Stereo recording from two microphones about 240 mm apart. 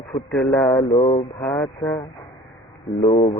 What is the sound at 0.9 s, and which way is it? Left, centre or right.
Speech, left.